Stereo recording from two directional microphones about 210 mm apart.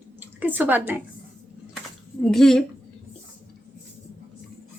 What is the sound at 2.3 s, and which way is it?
Speech, centre (ahead or behind).